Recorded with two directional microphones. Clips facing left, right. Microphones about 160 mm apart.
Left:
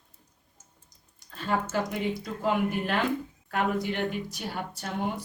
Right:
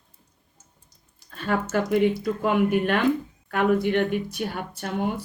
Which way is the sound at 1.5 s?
65° right (ahead or behind).